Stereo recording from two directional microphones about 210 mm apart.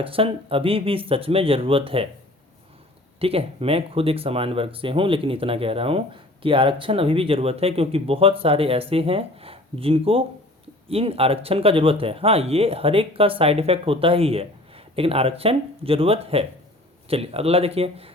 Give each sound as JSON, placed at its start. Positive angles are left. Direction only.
{"t": 0.0, "sound": "speech", "side_deg": -25}
{"t": 3.2, "sound": "speech", "side_deg": -25}